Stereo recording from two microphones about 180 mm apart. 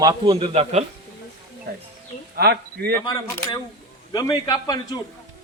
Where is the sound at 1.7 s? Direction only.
55° right (ahead or behind).